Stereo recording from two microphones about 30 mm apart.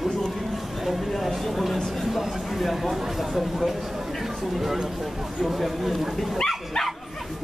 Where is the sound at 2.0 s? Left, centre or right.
Centre.